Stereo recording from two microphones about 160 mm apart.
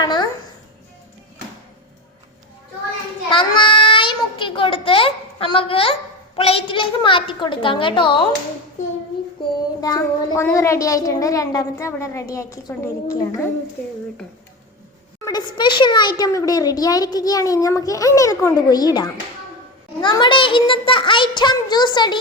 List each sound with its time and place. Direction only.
0.0 s music: 25° left (ahead or behind)
3.2 s child singing: 30° left (ahead or behind)
9.8 s a child's voice: 20° left (ahead or behind)
15.2 s a child's voice: 25° left (ahead or behind)